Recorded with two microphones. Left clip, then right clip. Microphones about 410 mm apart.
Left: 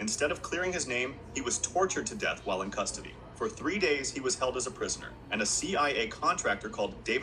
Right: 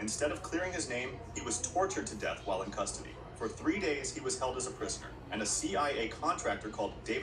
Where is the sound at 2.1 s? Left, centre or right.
Left.